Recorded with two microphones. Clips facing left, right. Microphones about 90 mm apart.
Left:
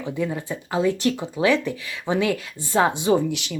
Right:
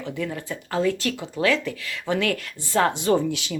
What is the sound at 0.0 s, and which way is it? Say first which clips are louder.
Speech: left 3 dB; 15° left (ahead or behind).